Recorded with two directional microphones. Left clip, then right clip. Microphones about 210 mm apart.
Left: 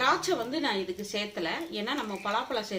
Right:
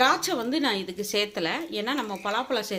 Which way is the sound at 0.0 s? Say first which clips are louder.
Right 4 dB; 55° right (ahead or behind).